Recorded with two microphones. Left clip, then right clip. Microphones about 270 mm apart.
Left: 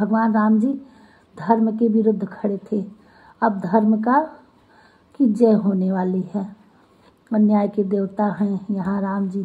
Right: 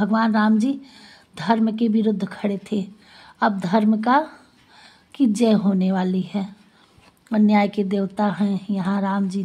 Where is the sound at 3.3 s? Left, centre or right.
Right.